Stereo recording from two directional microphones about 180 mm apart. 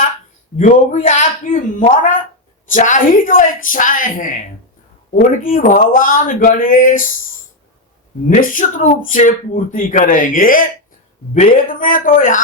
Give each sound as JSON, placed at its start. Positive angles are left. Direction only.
{"t": 0.5, "sound": "speech", "side_deg": 40}
{"t": 8.3, "sound": "speech", "side_deg": 45}